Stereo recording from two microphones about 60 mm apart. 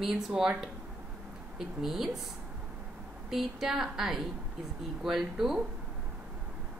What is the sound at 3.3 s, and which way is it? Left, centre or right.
A woman's voice, centre.